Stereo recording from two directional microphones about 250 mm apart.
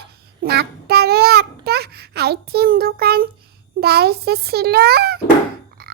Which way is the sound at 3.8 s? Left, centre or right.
Right.